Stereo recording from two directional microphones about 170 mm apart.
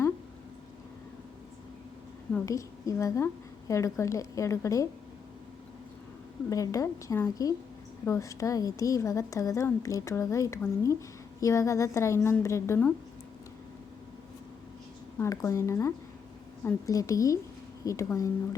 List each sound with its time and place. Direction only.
2.5 s a woman's voice: 20° left (ahead or behind)
6.5 s a woman's voice: 20° left (ahead or behind)
15.2 s a woman's voice: 20° left (ahead or behind)